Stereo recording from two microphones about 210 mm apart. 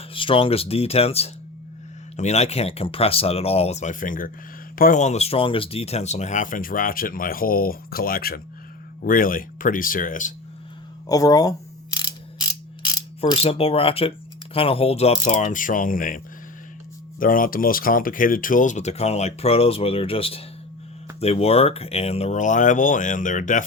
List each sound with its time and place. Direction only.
0.1 s speech: 25° left (ahead or behind)
11.0 s speech: 15° left (ahead or behind)
11.9 s mechanisms: 20° left (ahead or behind)
14.5 s speech: 25° left (ahead or behind)